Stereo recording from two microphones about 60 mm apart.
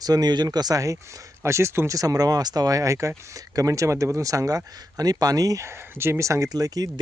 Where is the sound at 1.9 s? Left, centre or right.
Right.